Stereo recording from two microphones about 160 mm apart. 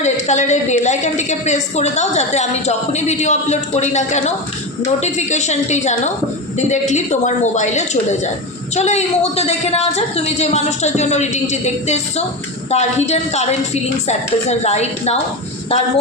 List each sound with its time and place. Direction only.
0.0 s a woman's voice: 45° left (ahead or behind)